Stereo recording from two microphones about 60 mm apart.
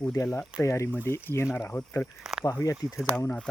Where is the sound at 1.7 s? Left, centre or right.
Left.